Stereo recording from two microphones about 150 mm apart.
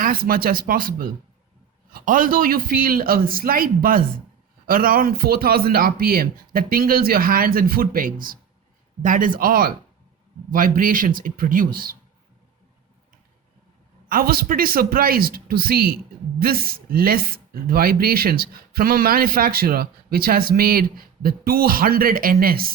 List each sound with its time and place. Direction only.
0.0 s a man's voice: 75° right (ahead or behind)
14.1 s speech: 80° right